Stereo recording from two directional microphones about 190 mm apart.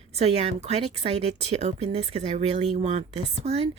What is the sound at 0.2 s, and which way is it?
Speech, 35° right (ahead or behind).